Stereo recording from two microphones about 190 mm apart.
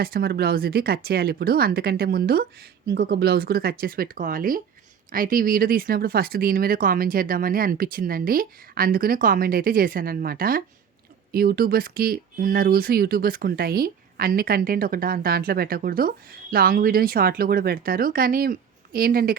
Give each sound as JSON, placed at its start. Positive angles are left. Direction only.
{"t": 0.0, "sound": "speech", "side_deg": -55}